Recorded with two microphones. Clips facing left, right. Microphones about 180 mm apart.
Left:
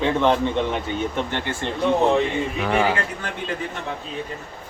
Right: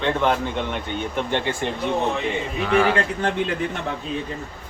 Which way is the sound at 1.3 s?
15° right (ahead or behind).